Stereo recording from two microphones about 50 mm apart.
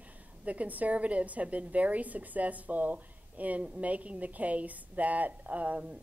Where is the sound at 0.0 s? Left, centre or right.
Right.